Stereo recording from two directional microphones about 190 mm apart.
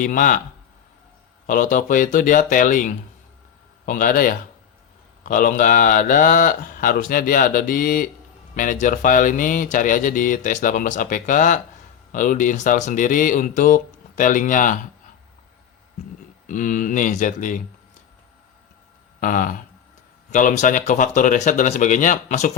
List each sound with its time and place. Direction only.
0.0 s speech: 45° left (ahead or behind)
1.5 s speech: 45° left (ahead or behind)
16.5 s speech: 45° left (ahead or behind)
19.2 s speech: 45° left (ahead or behind)